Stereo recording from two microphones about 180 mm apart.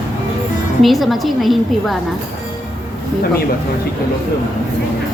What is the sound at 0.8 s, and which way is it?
A woman's voice, centre (ahead or behind).